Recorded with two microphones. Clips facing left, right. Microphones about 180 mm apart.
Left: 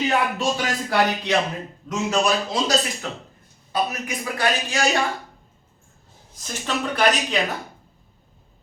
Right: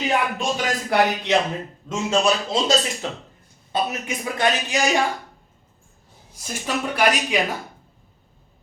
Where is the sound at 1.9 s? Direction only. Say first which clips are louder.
Right 1 dB; 25° right (ahead or behind).